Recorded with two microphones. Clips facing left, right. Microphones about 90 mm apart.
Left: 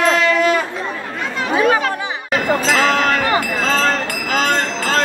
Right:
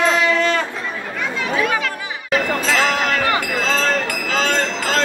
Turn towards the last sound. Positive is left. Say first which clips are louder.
# left 2 dB
turn(degrees=40)  # may be behind; listen again after turning